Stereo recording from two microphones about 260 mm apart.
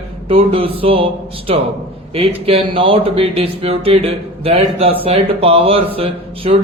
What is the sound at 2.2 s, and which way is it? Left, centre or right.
Speech, right.